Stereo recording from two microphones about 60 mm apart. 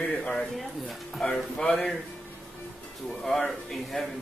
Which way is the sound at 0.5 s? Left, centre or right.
Centre.